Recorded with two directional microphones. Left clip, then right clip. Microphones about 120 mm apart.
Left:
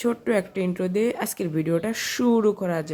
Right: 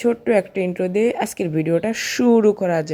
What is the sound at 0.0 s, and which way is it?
Speech, 15° right (ahead or behind).